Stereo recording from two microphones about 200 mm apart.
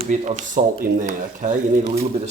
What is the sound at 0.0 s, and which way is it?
Speech, 35° right (ahead or behind).